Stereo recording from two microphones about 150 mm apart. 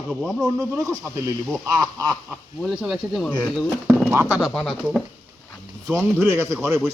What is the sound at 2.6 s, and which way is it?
Speech, 5° right (ahead or behind).